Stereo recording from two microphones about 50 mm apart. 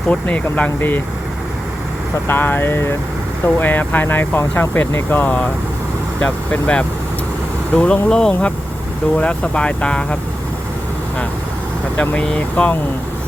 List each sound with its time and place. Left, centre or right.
0.1 s speech: left
0.8 s speech: left
2.2 s speech: left
3.4 s speech: left
4.4 s speech: left
5.1 s speech: left
6.1 s speech: left
8.3 s speech: left
11.9 s speech: left